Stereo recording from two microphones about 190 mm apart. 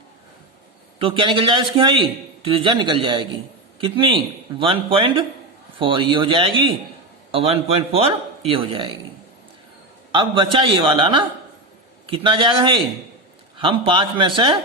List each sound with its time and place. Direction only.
0.9 s a man's voice: 25° right (ahead or behind)
10.1 s a man's voice: 25° right (ahead or behind)